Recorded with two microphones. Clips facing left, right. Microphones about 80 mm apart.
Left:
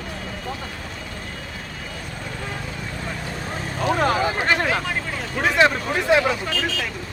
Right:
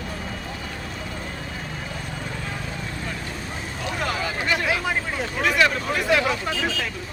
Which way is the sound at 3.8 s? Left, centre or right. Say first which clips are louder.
Left 8 dB; left.